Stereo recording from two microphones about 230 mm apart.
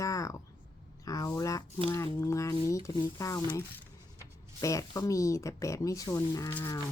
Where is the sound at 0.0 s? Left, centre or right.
Centre.